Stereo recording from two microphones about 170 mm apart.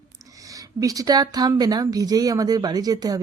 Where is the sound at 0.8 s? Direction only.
20° right (ahead or behind).